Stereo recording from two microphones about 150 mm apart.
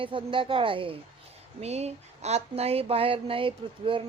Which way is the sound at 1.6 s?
45° right (ahead or behind).